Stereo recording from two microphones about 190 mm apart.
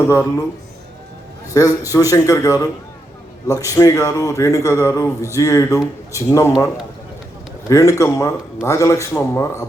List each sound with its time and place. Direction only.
0.1 s speech: 15° left (ahead or behind)
1.5 s a man's voice: 20° left (ahead or behind)
7.7 s speech: 15° left (ahead or behind)